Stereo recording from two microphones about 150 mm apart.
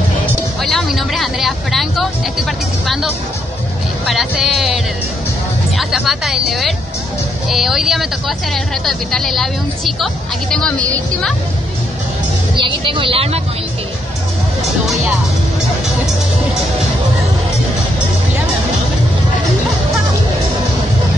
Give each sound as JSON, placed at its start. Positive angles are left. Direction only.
{"t": 0.6, "sound": "speech", "side_deg": 0}
{"t": 4.0, "sound": "speech", "side_deg": 0}
{"t": 5.8, "sound": "speech", "side_deg": 0}
{"t": 12.5, "sound": "speech", "side_deg": -30}